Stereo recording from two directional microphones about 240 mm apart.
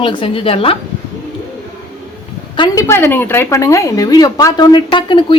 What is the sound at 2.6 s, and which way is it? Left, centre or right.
Speech, centre.